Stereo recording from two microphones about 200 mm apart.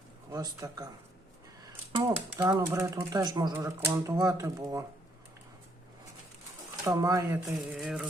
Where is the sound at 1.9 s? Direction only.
20° right (ahead or behind).